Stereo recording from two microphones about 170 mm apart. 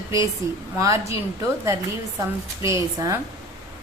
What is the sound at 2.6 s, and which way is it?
Speech, 20° right (ahead or behind).